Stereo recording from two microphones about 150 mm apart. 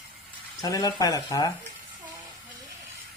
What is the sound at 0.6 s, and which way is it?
Speech, 25° left (ahead or behind).